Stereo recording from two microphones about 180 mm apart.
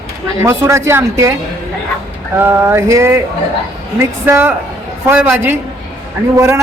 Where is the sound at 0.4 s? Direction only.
15° right (ahead or behind).